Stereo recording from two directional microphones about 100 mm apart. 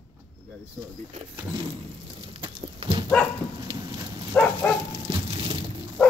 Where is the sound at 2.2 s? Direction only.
60° right (ahead or behind).